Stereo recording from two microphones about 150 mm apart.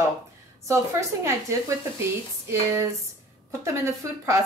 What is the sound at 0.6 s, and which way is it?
A woman's voice, 20° right (ahead or behind).